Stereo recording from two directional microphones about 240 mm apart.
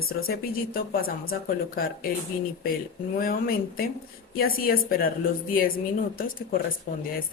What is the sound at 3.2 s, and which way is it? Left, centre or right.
Speech, left.